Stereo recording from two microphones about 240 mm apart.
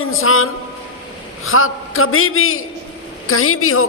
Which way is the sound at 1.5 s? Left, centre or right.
Left.